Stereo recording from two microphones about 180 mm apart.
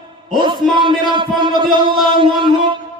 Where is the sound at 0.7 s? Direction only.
25° right (ahead or behind).